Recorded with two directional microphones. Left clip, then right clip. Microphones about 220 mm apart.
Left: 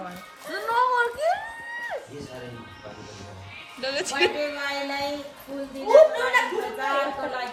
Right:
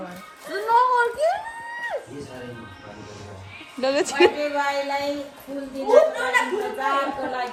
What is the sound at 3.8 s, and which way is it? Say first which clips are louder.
Music: right 6 dB; 5° left (ahead or behind).